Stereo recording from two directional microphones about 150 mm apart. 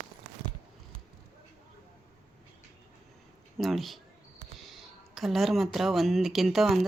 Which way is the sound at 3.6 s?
Centre (ahead or behind).